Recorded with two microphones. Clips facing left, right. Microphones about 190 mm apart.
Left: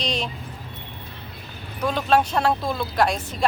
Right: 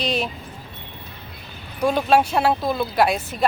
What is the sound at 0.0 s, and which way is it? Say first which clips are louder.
Speech: right 3 dB; 5° right (ahead or behind).